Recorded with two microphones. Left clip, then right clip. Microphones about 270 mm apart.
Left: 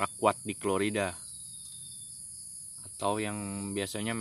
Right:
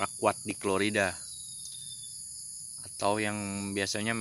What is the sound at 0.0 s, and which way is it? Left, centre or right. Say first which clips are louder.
Speech: left 1 dB; centre.